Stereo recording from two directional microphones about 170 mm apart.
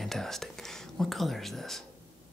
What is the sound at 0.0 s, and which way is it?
Whispering, centre (ahead or behind).